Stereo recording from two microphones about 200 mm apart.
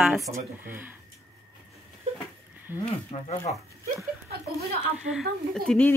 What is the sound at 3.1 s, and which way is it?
Speech, 30° left (ahead or behind).